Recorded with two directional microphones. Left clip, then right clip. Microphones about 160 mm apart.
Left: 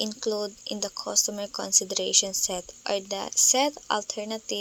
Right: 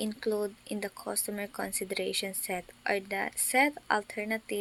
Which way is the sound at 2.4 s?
20° left (ahead or behind).